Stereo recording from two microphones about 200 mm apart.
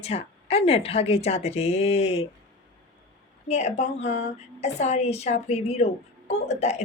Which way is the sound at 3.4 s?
35° left (ahead or behind).